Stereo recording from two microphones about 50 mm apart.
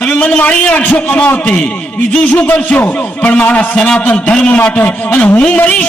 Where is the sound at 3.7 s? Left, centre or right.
Centre; by 5.9 s left.